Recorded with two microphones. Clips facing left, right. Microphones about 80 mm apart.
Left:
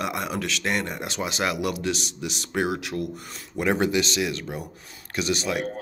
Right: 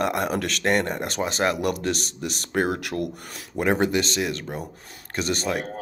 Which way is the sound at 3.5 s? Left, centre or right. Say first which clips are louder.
Right 1 dB; right.